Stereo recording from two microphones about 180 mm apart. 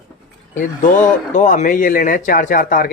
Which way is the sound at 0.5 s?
45° left (ahead or behind).